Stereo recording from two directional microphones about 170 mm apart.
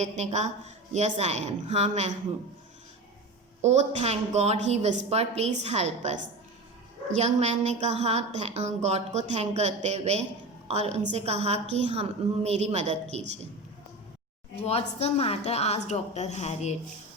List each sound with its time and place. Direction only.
0.0 s a woman's voice: 40° right (ahead or behind)
3.6 s a woman's voice: 40° right (ahead or behind)
7.2 s a woman's voice: 40° right (ahead or behind)
14.6 s a woman's voice: 40° left (ahead or behind)